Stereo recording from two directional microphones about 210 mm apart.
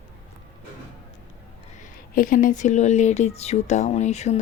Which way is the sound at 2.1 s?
40° left (ahead or behind).